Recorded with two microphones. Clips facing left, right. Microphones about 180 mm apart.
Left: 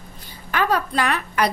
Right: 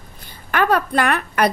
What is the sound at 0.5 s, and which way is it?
Speech, 55° right (ahead or behind).